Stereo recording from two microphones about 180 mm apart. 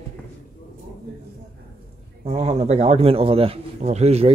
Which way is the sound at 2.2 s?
35° right (ahead or behind).